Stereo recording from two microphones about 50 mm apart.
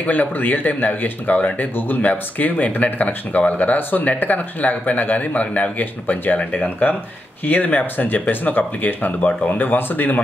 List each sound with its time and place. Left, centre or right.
0.0 s speech: left